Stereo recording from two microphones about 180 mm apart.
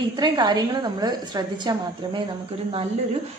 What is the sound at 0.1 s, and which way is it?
A woman's voice, 25° right (ahead or behind).